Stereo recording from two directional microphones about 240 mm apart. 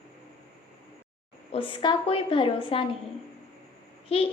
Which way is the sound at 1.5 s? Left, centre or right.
Left.